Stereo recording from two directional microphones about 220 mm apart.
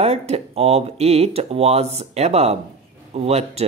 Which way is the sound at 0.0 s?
30° right (ahead or behind).